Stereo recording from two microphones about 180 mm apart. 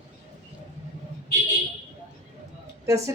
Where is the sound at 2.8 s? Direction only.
15° right (ahead or behind).